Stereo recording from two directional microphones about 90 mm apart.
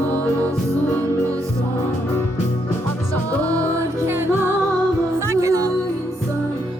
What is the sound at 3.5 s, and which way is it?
Music, 35° right (ahead or behind).